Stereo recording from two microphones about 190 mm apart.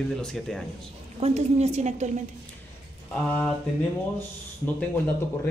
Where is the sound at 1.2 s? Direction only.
35° right (ahead or behind).